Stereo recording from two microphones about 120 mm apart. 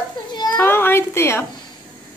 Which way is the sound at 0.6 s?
20° left (ahead or behind).